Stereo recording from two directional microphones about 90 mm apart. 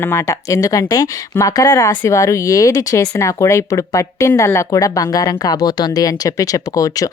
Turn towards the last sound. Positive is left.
turn(degrees=40)  # may be behind; listen again after turning